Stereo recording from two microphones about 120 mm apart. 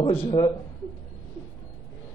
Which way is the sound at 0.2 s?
45° left (ahead or behind).